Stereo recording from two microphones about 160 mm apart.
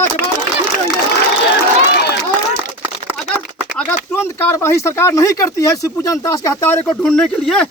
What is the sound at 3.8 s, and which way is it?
Speech, 15° left (ahead or behind).